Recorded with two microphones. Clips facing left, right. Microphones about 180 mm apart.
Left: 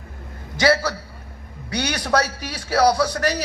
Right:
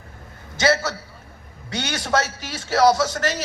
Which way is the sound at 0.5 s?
25° right (ahead or behind).